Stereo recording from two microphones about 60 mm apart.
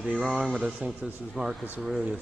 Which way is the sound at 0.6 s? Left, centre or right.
Centre.